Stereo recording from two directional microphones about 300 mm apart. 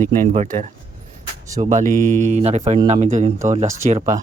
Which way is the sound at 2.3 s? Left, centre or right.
Right.